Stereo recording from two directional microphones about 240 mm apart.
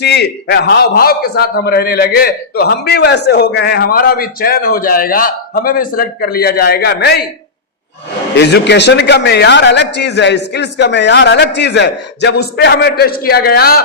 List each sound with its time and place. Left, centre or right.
0.0 s a man's voice: left
8.4 s a man's voice: left